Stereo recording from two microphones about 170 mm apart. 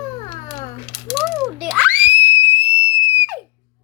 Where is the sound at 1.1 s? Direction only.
Centre (ahead or behind).